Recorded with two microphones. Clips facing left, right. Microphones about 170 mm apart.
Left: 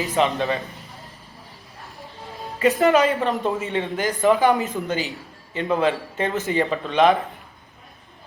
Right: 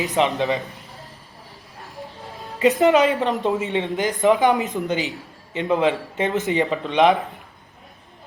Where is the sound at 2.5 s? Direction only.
20° right (ahead or behind).